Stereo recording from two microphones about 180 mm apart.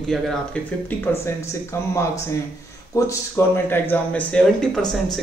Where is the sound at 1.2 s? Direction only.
15° left (ahead or behind).